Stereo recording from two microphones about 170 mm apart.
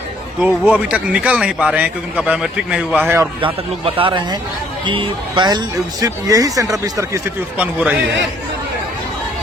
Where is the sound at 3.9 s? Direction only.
30° right (ahead or behind); by 8.0 s 10° right (ahead or behind).